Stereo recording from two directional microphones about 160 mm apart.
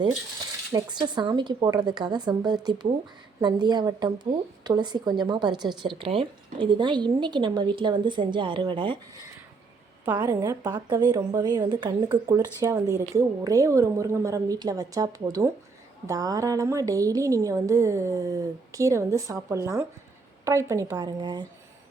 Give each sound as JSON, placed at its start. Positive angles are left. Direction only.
{"t": 0.7, "sound": "speech", "side_deg": -25}
{"t": 10.1, "sound": "speech", "side_deg": -25}